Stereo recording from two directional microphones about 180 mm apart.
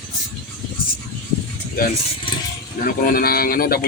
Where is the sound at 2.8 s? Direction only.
55° left (ahead or behind).